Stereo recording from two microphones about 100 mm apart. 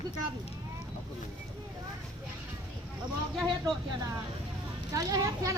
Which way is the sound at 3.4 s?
Centre (ahead or behind).